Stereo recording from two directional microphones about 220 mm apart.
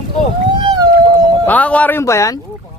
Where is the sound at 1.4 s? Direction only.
5° left (ahead or behind).